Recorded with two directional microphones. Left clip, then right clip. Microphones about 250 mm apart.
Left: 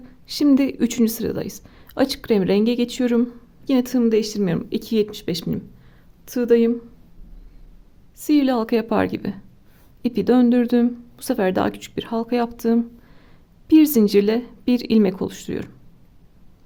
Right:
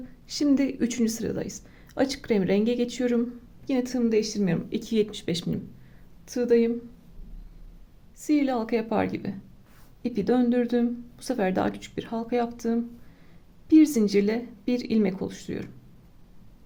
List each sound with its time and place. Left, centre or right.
0.3 s speech: left
8.2 s speech: left